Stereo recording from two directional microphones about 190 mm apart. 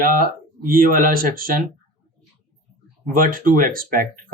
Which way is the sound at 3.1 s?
45° right (ahead or behind).